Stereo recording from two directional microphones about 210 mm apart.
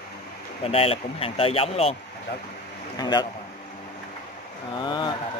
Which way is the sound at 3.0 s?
20° left (ahead or behind).